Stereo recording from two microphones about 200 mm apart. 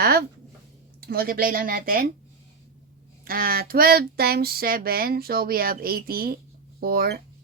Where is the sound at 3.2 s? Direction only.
45° right (ahead or behind).